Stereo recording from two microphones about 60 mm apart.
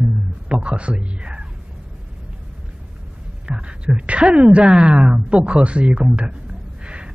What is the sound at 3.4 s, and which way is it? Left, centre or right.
A man's voice, centre.